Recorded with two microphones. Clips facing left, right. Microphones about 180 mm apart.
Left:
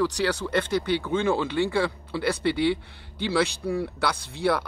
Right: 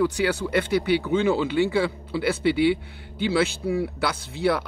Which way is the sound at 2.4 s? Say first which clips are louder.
Right 5 dB; 60° right (ahead or behind).